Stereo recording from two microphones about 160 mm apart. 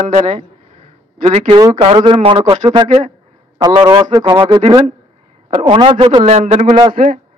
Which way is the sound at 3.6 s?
25° right (ahead or behind).